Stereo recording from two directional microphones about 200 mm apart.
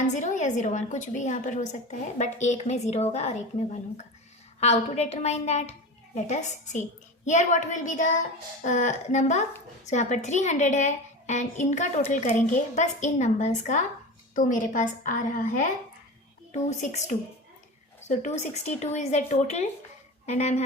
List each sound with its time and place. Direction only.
0.1 s a woman's voice: 40° left (ahead or behind)